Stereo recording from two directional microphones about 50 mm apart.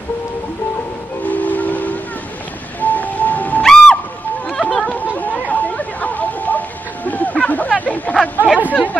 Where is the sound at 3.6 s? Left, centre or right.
Centre.